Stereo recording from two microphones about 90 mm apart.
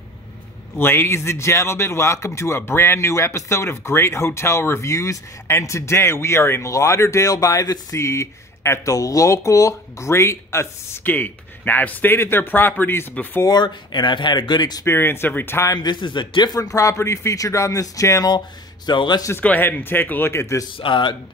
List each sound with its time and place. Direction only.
0.7 s speech: 25° left (ahead or behind); by 8.0 s 45° left (ahead or behind)
8.0 s speech: 35° left (ahead or behind)
13.5 s speech: 55° left (ahead or behind)
14.9 s speech: 25° left (ahead or behind)
15.7 s speech: 50° left (ahead or behind)
16.5 s speech: 40° left (ahead or behind)
18.9 s speech: 55° left (ahead or behind)
19.4 s speech: 15° left (ahead or behind)
20.7 s speech: 70° left (ahead or behind)